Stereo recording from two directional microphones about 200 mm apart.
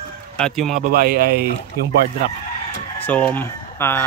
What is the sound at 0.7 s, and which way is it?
Speech, 50° right (ahead or behind).